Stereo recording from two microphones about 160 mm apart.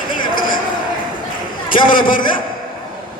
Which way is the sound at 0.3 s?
60° left (ahead or behind).